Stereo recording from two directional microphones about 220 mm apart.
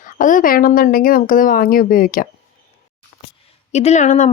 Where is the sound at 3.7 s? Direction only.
30° left (ahead or behind).